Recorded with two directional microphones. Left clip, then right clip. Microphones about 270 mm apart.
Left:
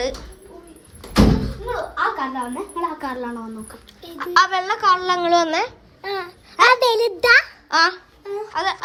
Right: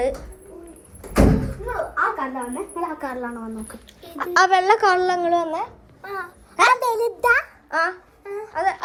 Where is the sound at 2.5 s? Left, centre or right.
Centre.